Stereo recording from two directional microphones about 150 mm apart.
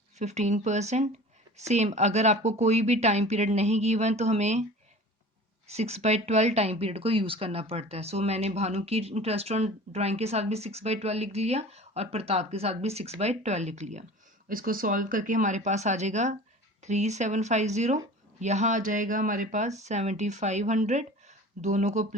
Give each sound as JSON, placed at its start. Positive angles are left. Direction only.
{"t": 0.2, "sound": "speech", "side_deg": -50}
{"t": 5.6, "sound": "speech", "side_deg": -45}
{"t": 14.5, "sound": "speech", "side_deg": -70}